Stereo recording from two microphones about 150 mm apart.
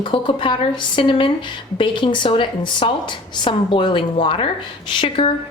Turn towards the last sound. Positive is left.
turn(degrees=40)  # may be behind; listen again after turning